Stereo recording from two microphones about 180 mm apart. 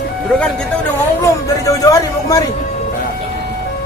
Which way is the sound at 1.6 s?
20° left (ahead or behind).